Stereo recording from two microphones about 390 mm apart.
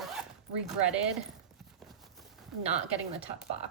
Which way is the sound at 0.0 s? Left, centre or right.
Centre.